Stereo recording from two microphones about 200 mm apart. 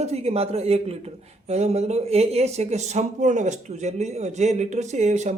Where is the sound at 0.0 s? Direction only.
30° right (ahead or behind).